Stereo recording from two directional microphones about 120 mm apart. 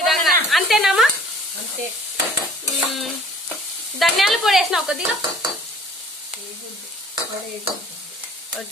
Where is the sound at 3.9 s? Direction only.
Centre (ahead or behind).